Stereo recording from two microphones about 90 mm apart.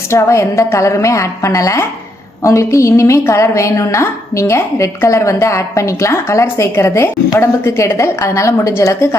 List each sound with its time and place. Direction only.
0.1 s a woman's voice: 30° left (ahead or behind)